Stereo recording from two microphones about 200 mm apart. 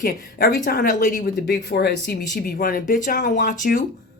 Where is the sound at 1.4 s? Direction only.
55° left (ahead or behind).